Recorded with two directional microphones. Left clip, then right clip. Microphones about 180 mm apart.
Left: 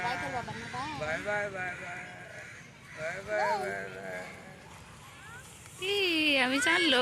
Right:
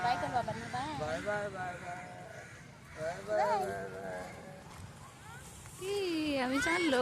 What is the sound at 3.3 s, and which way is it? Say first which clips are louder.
Speech: left 1 dB; 45° left (ahead or behind).